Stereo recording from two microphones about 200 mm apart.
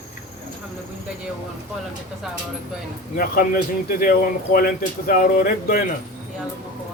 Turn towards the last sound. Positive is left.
turn(degrees=45)  # may be behind; listen again after turning